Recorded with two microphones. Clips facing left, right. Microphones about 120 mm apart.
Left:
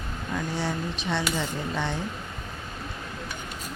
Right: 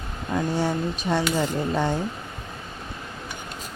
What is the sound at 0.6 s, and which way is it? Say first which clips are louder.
Speech: right 5 dB; 45° right (ahead or behind).